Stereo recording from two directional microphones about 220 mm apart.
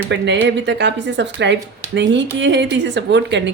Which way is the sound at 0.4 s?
55° right (ahead or behind).